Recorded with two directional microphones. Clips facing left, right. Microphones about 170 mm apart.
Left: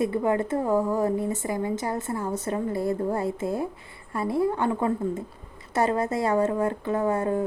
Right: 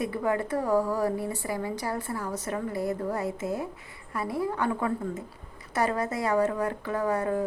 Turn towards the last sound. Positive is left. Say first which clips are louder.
# left 3 dB
turn(degrees=25)  # may be behind; listen again after turning